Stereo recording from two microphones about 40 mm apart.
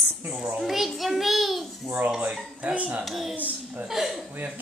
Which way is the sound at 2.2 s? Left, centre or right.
Right.